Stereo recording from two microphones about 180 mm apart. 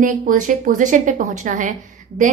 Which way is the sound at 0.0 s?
45° right (ahead or behind).